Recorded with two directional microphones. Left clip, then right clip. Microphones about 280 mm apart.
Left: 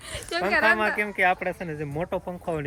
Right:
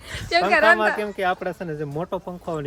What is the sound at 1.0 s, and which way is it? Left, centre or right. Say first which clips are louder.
Speech: left 1 dB; centre.